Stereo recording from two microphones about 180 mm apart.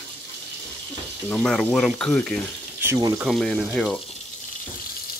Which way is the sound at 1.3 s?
5° left (ahead or behind).